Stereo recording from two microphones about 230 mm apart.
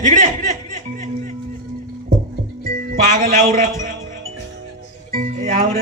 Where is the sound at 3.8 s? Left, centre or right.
Right.